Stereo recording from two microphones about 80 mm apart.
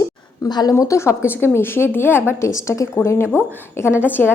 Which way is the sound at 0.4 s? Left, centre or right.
Left.